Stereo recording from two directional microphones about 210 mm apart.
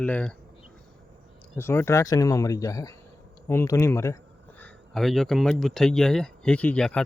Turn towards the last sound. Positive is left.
turn(degrees=5)  # may be behind; listen again after turning